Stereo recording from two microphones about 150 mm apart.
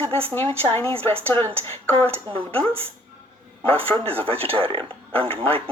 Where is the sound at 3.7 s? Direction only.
40° right (ahead or behind).